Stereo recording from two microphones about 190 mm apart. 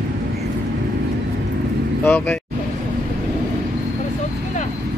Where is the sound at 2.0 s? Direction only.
10° left (ahead or behind).